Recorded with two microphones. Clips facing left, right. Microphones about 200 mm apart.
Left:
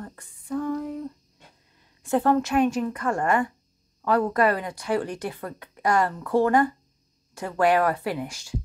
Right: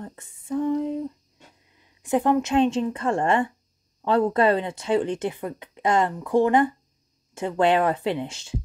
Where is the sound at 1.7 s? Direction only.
15° right (ahead or behind).